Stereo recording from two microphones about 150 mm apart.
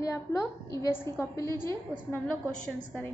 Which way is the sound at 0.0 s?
20° left (ahead or behind).